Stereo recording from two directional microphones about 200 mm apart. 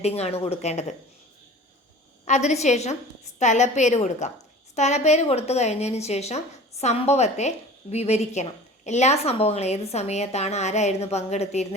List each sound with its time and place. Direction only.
0.0 s a woman's voice: 30° left (ahead or behind)
2.2 s a woman's voice: 35° left (ahead or behind)